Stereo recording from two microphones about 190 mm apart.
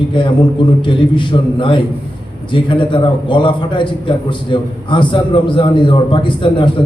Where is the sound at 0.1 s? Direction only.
25° left (ahead or behind).